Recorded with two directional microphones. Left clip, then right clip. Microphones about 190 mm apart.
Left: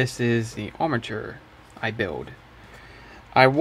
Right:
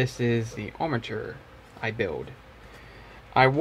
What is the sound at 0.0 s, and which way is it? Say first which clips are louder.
Speech: left 3 dB; 30° left (ahead or behind).